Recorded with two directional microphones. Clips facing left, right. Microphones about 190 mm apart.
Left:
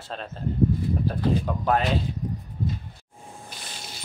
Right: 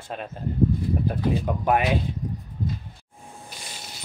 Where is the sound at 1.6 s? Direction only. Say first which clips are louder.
Right 2 dB; 15° right (ahead or behind).